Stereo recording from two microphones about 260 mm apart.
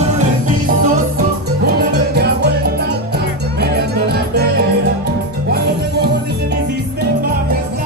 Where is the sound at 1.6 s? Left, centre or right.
Right.